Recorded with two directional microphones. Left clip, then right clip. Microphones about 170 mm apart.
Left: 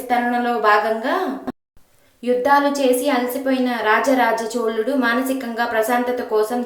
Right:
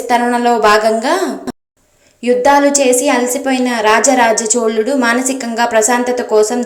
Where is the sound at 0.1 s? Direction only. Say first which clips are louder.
Right 7 dB; 25° right (ahead or behind).